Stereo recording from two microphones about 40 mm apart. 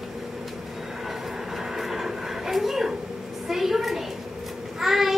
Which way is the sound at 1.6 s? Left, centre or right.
Centre.